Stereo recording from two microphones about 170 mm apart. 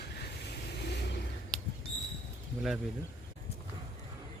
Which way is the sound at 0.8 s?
75° left (ahead or behind).